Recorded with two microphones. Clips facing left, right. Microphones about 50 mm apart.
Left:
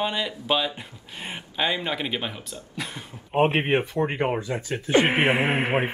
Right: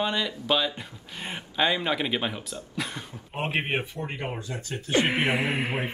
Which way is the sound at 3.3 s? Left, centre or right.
Left.